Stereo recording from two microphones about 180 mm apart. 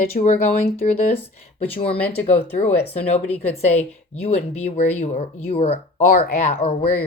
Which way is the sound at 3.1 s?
35° left (ahead or behind).